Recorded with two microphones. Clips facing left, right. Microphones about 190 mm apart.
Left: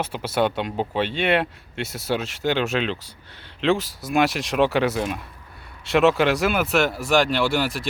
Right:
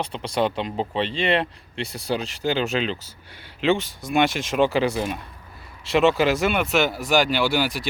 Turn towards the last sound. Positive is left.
turn(degrees=0)  # may be behind; listen again after turning